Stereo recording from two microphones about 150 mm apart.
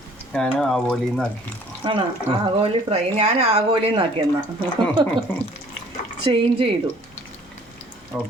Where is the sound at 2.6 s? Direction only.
40° right (ahead or behind).